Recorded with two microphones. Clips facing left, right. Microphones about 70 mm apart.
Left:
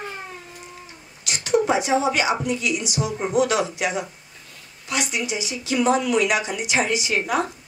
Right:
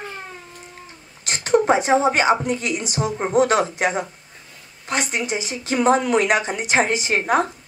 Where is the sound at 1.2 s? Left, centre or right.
Right.